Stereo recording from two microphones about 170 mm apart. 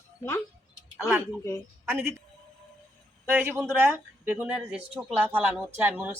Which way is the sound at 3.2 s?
10° right (ahead or behind).